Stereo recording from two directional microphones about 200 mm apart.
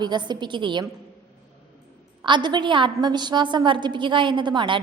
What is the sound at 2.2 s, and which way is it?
A woman's voice, 25° right (ahead or behind).